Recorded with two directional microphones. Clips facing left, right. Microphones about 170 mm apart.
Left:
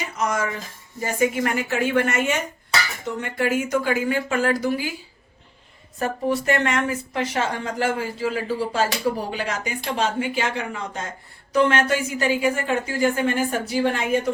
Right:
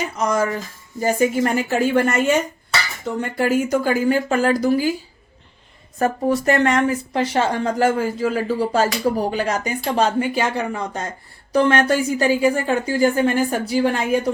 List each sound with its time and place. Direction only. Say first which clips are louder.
0.2 s speech: right 4 dB; 35° right (ahead or behind)
6.0 s speech: right 4 dB; 40° right (ahead or behind)